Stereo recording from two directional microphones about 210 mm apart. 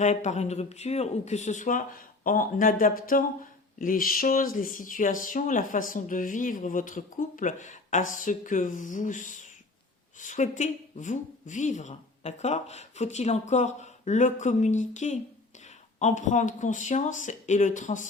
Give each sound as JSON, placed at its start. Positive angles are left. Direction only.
{"t": 0.0, "sound": "speech", "side_deg": 35}